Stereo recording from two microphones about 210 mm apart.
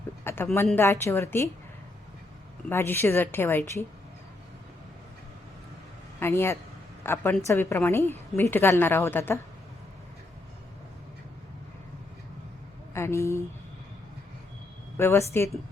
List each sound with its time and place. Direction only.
0.5 s a woman's voice: 10° left (ahead or behind)
2.6 s a woman's voice: 10° left (ahead or behind)
6.1 s a man's voice: 10° left (ahead or behind)
12.9 s a sound: 15° left (ahead or behind)
14.9 s speech: 10° left (ahead or behind)